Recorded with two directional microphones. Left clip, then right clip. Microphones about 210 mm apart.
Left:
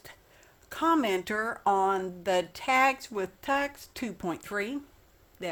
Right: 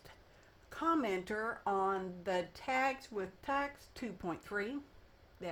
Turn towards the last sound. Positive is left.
turn(degrees=40)  # may be behind; listen again after turning